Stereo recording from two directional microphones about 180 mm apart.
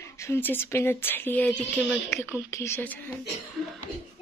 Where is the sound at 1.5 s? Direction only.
Centre (ahead or behind).